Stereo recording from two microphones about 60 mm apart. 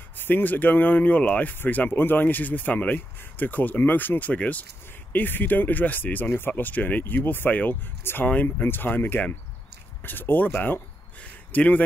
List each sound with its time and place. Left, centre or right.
0.2 s a man's voice: left